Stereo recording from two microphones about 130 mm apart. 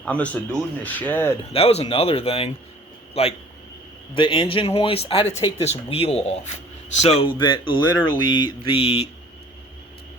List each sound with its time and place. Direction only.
0.0 s speech: 10° left (ahead or behind)
1.5 s speech: 50° left (ahead or behind)
4.1 s speech: 40° left (ahead or behind)
7.3 s speech: 35° left (ahead or behind)